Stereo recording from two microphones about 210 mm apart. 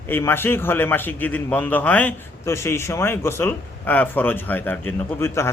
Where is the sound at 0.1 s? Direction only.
10° left (ahead or behind).